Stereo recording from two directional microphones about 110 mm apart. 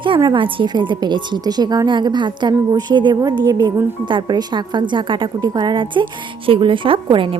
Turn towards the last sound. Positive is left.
turn(degrees=-50)  # may be behind; listen again after turning